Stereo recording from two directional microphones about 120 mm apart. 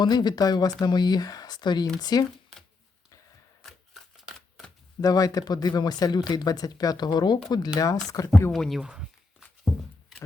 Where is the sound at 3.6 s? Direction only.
Centre (ahead or behind).